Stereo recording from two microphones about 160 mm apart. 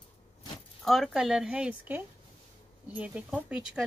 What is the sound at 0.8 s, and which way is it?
Speech, centre (ahead or behind).